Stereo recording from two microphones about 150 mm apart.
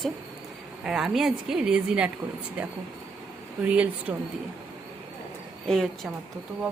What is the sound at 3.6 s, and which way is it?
Speech, 10° right (ahead or behind).